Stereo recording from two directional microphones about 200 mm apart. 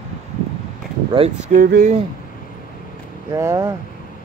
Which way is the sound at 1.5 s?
45° right (ahead or behind).